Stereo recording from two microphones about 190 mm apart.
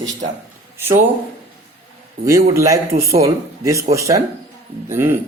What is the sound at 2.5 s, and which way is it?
Speech, 15° right (ahead or behind).